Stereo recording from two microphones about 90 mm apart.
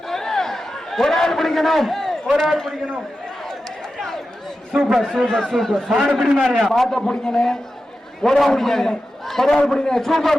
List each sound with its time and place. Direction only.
0.1 s a sound: 5° left (ahead or behind)
3.9 s chatter: 5° left (ahead or behind)
4.7 s a man's voice: 5° right (ahead or behind)